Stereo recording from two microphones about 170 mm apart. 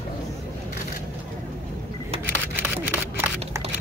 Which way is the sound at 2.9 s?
15° right (ahead or behind).